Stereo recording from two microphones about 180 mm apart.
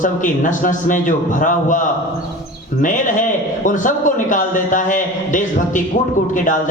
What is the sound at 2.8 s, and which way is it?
A man's voice, 45° left (ahead or behind).